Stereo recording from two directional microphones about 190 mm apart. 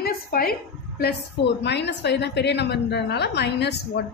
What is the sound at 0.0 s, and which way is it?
A woman's voice, 50° left (ahead or behind).